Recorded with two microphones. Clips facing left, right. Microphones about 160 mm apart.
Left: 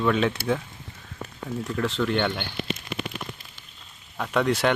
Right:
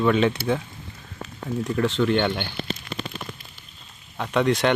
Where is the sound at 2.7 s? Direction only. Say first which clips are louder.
Even; 35° right (ahead or behind).